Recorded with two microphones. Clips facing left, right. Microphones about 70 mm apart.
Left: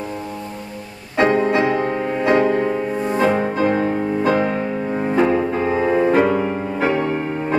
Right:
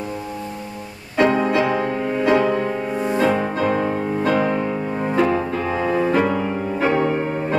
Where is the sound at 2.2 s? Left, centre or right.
Left.